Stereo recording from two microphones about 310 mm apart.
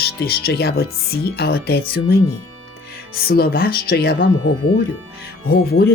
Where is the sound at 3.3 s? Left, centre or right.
Left.